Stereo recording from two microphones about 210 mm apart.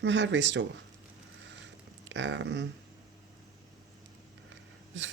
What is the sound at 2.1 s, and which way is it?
Speech, 60° right (ahead or behind).